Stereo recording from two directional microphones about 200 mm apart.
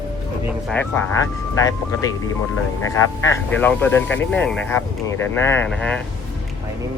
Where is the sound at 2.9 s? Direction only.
10° left (ahead or behind).